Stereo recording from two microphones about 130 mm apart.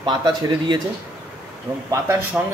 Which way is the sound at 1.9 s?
20° right (ahead or behind).